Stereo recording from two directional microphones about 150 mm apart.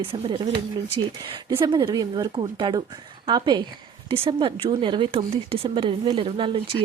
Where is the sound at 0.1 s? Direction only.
35° right (ahead or behind).